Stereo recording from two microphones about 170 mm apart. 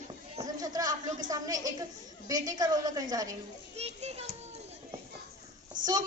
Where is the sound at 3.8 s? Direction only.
40° right (ahead or behind).